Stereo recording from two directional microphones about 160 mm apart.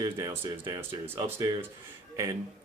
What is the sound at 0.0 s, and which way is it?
A man's voice, 20° right (ahead or behind).